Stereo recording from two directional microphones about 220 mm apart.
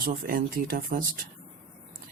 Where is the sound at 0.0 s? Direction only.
40° right (ahead or behind).